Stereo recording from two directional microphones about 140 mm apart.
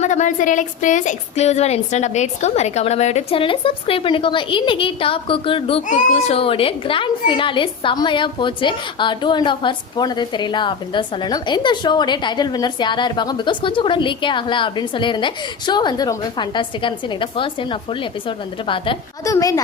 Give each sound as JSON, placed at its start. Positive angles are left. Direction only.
{"t": 0.0, "sound": "a woman's voice", "side_deg": 60}
{"t": 5.9, "sound": "speech", "side_deg": 55}
{"t": 19.2, "sound": "a woman's voice", "side_deg": 25}